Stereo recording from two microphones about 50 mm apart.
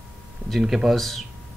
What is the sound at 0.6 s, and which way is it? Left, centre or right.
Speech, centre.